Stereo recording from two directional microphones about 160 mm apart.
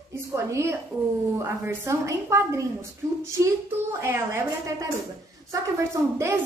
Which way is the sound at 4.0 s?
15° right (ahead or behind).